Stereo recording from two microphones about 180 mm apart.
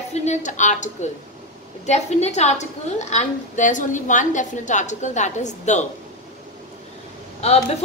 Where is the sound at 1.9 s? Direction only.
40° left (ahead or behind).